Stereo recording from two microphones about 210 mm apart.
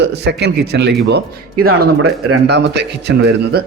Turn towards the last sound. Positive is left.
turn(degrees=-50)  # may be behind; listen again after turning